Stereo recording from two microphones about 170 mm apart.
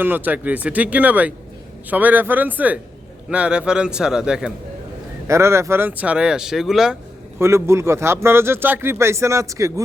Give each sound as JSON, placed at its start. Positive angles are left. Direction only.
{"t": 0.0, "sound": "a man's voice", "side_deg": -10}
{"t": 5.3, "sound": "speech", "side_deg": -15}
{"t": 7.3, "sound": "speech", "side_deg": -15}